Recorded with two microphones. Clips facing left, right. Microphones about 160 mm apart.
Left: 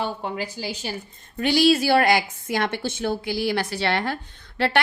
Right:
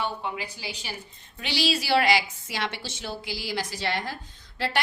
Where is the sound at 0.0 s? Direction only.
45° left (ahead or behind).